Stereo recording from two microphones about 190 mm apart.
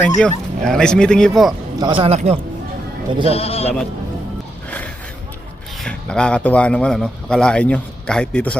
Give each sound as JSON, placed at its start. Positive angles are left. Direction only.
{"t": 0.2, "sound": "speech", "side_deg": 5}
{"t": 1.8, "sound": "speech", "side_deg": -25}
{"t": 3.2, "sound": "speech", "side_deg": 30}
{"t": 5.8, "sound": "speech", "side_deg": 5}